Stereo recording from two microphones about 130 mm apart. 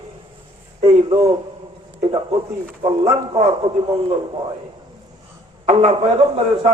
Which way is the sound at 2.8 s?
40° right (ahead or behind).